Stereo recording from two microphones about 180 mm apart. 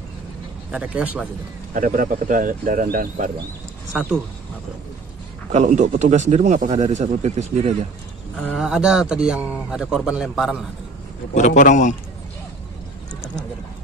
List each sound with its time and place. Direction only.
0.7 s speech: 5° right (ahead or behind)
1.7 s speech: 50° right (ahead or behind)
3.9 s a man's voice: centre (ahead or behind)
5.5 s a man's voice: 40° right (ahead or behind)
8.4 s a man's voice: centre (ahead or behind)
11.3 s a man's voice: 40° left (ahead or behind)